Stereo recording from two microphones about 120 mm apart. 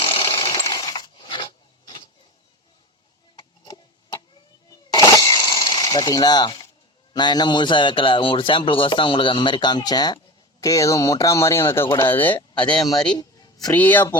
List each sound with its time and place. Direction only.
0.0 s a sound: 40° left (ahead or behind)
3.3 s a sound: 35° left (ahead or behind)
7.1 s a man's voice: 35° left (ahead or behind); by 12.4 s 15° left (ahead or behind)
12.4 s speech: 40° left (ahead or behind)
13.1 s music: 30° left (ahead or behind)
13.7 s speech: 15° left (ahead or behind)